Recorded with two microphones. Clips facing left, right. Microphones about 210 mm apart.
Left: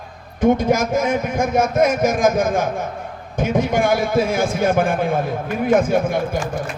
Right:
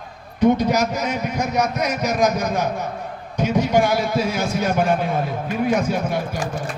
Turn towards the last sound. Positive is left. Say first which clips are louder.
# left 4 dB
turn(degrees=50)  # may be behind; listen again after turning